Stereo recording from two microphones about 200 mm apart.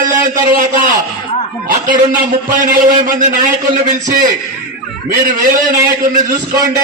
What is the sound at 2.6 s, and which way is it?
Speech, 40° right (ahead or behind).